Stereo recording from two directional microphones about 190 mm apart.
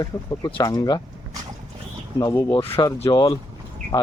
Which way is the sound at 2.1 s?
20° left (ahead or behind).